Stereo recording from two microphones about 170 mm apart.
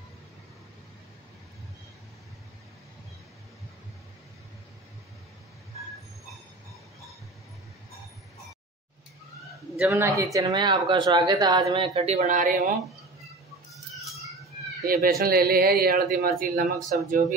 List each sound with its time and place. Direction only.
9.8 s speech: 15° right (ahead or behind); by 12.7 s 50° right (ahead or behind)
13.7 s a sound: centre (ahead or behind)
14.9 s speech: 60° right (ahead or behind)